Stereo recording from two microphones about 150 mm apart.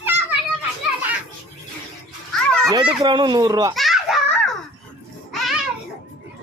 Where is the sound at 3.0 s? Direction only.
30° right (ahead or behind).